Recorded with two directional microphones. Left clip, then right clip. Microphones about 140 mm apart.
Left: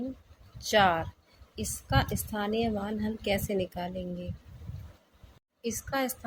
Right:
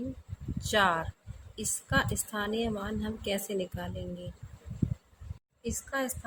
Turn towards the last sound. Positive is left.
turn(degrees=30)  # may be behind; listen again after turning